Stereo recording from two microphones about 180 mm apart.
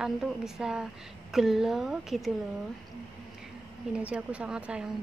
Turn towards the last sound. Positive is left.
turn(degrees=-5)  # may be behind; listen again after turning